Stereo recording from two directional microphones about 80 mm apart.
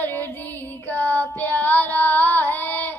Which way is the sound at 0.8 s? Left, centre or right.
Left.